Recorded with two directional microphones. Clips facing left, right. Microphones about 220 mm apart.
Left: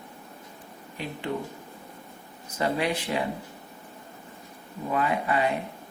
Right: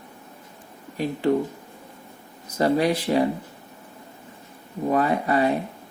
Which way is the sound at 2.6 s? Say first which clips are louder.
Right 6 dB; 35° right (ahead or behind).